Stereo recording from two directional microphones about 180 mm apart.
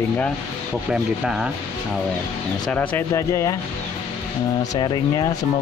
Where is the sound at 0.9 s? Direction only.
5° right (ahead or behind).